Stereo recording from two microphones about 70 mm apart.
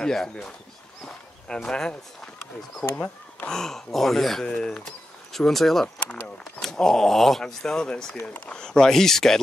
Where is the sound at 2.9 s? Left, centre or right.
Left.